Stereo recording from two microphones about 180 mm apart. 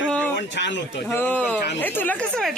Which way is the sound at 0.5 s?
75° left (ahead or behind).